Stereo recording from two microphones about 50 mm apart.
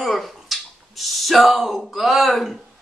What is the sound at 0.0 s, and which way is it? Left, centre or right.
Finger snapping, centre.